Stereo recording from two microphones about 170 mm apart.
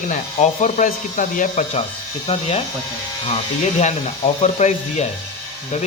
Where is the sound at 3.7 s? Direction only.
40° left (ahead or behind).